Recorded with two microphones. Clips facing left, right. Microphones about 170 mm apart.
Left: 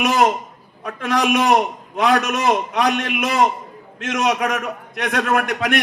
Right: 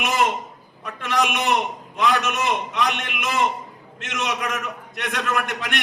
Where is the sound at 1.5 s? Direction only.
60° left (ahead or behind).